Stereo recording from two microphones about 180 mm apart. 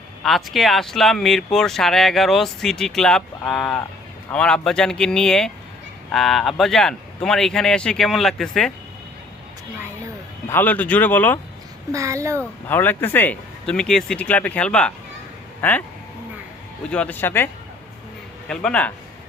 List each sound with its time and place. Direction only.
0.2 s speech: centre (ahead or behind)
10.5 s speech: 10° left (ahead or behind)
11.9 s a child's voice: 15° right (ahead or behind)
12.4 s speech: 10° left (ahead or behind)
16.9 s speech: 10° left (ahead or behind)